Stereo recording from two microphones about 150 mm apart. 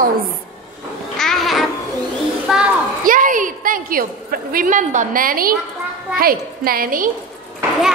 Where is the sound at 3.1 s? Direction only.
65° right (ahead or behind).